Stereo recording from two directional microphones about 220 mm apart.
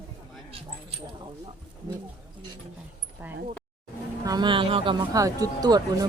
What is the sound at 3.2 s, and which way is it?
Speech, 10° right (ahead or behind).